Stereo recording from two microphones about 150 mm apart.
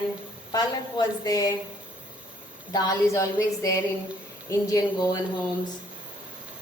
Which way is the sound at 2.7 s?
25° left (ahead or behind).